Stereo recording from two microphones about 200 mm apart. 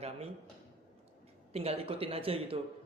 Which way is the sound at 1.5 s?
30° right (ahead or behind).